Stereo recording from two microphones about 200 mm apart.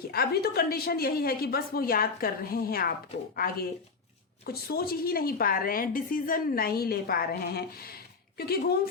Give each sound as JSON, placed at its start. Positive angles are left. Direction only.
{"t": 0.1, "sound": "a woman's voice", "side_deg": 50}